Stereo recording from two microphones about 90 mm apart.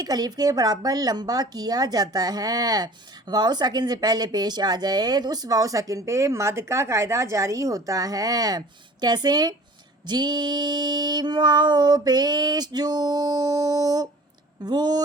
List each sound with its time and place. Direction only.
0.0 s speech: 45° right (ahead or behind)